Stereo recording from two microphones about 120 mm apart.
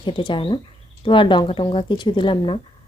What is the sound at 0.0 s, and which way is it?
A woman's voice, 45° left (ahead or behind).